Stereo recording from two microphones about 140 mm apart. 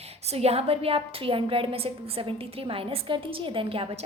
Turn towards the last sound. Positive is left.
turn(degrees=-40)  # may be behind; listen again after turning